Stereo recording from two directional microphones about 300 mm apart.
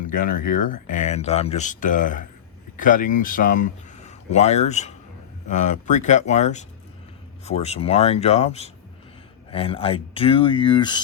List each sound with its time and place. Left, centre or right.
0.0 s speech: left